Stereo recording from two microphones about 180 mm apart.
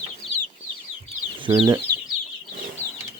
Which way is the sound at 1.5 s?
20° right (ahead or behind).